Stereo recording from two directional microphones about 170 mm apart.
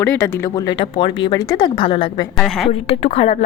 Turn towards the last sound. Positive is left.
turn(degrees=35)  # may be behind; listen again after turning